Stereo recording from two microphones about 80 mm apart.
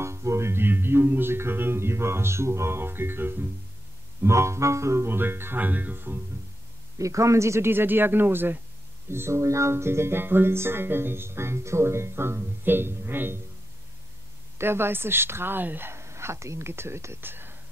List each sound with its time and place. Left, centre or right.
0.0 s music: right
7.0 s music: right
9.1 s speech: right
14.6 s speech: right